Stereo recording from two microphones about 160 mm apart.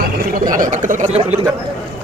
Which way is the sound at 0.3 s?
60° right (ahead or behind).